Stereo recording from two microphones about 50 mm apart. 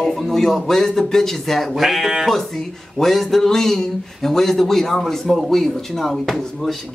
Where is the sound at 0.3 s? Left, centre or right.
Centre.